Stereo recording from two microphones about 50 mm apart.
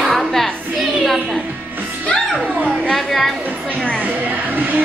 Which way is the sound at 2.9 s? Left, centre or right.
Centre.